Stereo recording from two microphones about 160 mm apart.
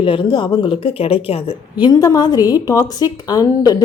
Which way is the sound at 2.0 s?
25° left (ahead or behind).